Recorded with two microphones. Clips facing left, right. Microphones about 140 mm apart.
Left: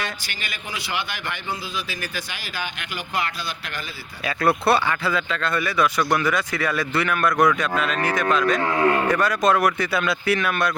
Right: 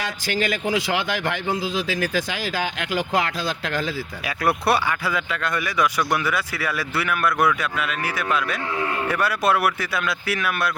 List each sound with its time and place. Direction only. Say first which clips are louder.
0.0 s a man's voice: right 7 dB; 90° right
4.3 s speech: left 2 dB; 10° right (ahead or behind)
8.6 s speech: left 6 dB; 65° left (ahead or behind)
9.0 s speech: left 2 dB; 10° right (ahead or behind)